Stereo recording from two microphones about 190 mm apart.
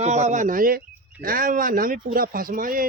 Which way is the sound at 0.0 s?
35° right (ahead or behind).